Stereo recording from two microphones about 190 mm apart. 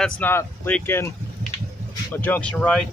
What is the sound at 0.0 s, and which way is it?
Speech, 10° left (ahead or behind).